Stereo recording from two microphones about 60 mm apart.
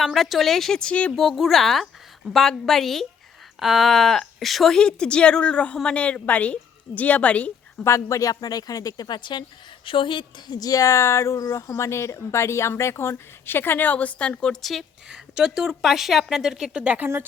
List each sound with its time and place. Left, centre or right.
0.0 s speech: centre
4.8 s a woman's voice: centre
7.9 s speech: left
10.6 s speech: left; by 14.6 s centre
14.6 s speech: centre
15.1 s speech: centre